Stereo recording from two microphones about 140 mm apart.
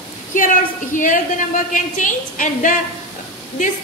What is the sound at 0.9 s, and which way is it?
A woman's voice, 70° left (ahead or behind).